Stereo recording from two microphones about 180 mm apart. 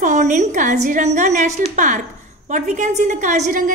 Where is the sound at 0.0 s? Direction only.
45° right (ahead or behind).